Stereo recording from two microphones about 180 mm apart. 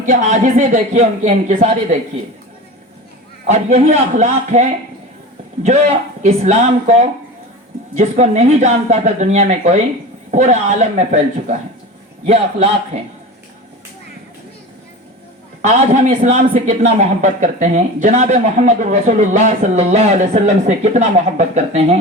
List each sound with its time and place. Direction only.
0.0 s speech: 45° right (ahead or behind)
3.4 s speech: 40° right (ahead or behind)
12.2 s speech: 40° right (ahead or behind)
15.6 s speech: 40° right (ahead or behind)